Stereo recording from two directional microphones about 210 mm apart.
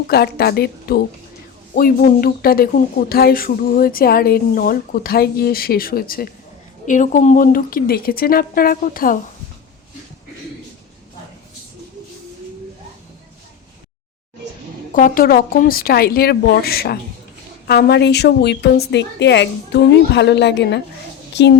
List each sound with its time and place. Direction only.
0.1 s speech: 50° left (ahead or behind)
14.9 s speech: 40° left (ahead or behind)